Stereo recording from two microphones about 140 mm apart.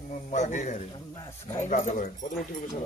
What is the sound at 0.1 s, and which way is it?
A man's voice, 55° left (ahead or behind).